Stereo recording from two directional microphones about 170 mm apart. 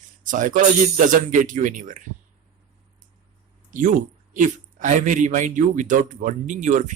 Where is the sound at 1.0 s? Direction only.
50° right (ahead or behind).